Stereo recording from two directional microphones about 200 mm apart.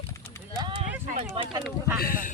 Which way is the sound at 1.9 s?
45° left (ahead or behind).